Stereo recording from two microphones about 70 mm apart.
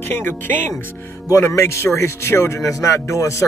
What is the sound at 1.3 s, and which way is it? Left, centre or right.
Speech, left.